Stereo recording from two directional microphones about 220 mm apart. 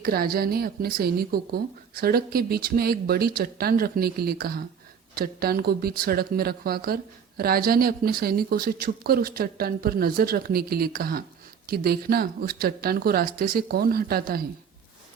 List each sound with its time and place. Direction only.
0.0 s speech: 45° right (ahead or behind)